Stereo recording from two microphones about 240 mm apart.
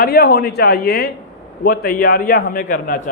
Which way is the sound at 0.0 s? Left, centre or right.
Left.